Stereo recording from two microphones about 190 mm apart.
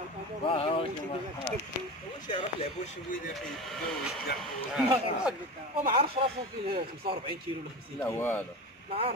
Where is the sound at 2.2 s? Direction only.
25° left (ahead or behind).